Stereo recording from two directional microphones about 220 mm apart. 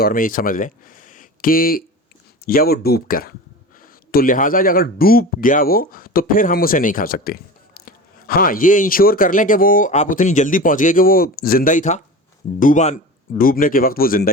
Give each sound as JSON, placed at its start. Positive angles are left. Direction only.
{"t": 0.0, "sound": "speech", "side_deg": 40}